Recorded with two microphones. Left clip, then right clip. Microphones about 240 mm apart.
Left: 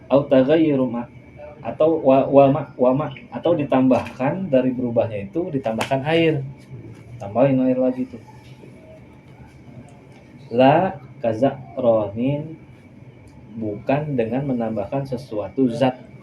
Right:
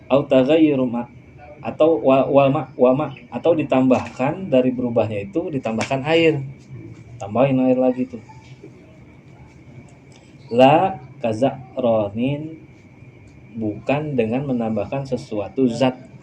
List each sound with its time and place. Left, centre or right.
0.1 s speech: right
10.5 s speech: right
13.8 s speech: right